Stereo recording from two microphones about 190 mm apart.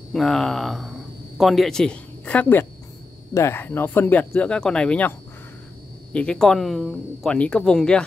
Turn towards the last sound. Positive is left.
turn(degrees=5)  # may be behind; listen again after turning